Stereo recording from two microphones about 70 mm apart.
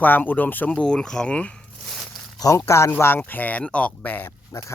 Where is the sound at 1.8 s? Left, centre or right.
Centre.